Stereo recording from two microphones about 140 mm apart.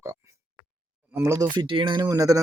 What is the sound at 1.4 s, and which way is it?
Speech, 35° right (ahead or behind).